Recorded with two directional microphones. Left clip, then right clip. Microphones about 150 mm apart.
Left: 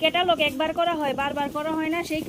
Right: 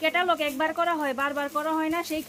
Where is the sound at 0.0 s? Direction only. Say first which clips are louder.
Left 3 dB; 10° left (ahead or behind).